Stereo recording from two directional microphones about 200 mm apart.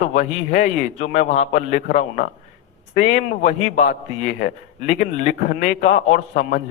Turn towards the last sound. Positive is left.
turn(degrees=40)  # may be behind; listen again after turning